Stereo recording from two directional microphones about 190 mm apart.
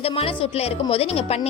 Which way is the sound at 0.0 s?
30° left (ahead or behind).